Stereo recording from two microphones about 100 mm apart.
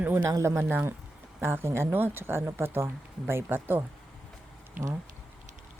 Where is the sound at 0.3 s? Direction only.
30° right (ahead or behind).